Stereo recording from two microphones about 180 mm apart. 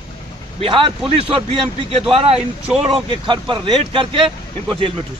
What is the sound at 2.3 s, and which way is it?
Speech, 5° right (ahead or behind).